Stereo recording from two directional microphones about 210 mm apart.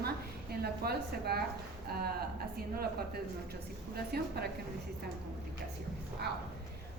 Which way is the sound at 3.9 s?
50° right (ahead or behind).